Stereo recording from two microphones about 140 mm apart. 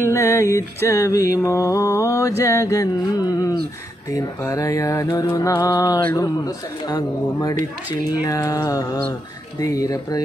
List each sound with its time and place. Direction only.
0.0 s music: 20° left (ahead or behind)